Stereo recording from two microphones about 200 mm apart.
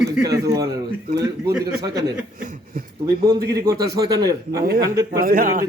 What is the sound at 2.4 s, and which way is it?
Speech, 45° right (ahead or behind).